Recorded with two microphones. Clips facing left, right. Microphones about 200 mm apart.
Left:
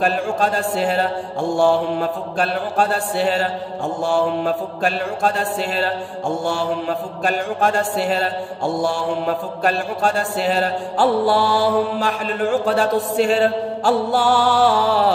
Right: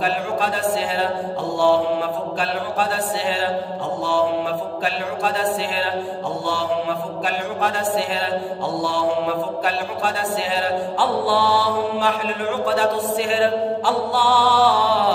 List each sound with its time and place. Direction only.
0.0 s speech: 45° left (ahead or behind)
1.6 s music: 45° left (ahead or behind)
4.8 s music: 45° left (ahead or behind)
7.2 s music: 45° left (ahead or behind)
9.7 s music: 45° left (ahead or behind)